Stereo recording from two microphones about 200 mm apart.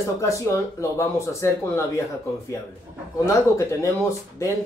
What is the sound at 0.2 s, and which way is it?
Speech, 15° left (ahead or behind).